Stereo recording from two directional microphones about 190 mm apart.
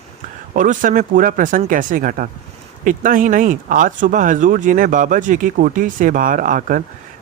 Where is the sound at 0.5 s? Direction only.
45° right (ahead or behind).